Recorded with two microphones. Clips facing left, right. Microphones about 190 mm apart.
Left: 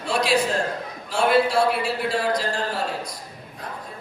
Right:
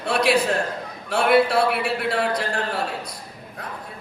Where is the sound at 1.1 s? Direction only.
60° right (ahead or behind).